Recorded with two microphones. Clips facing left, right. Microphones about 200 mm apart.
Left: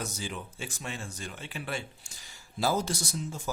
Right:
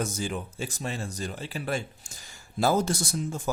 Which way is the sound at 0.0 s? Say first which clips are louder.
Right 6 dB; 50° right (ahead or behind).